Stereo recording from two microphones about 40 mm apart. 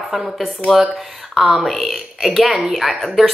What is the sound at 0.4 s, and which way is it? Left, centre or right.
A woman's voice, centre.